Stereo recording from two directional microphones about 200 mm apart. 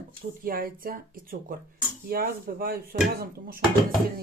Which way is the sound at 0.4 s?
45° right (ahead or behind).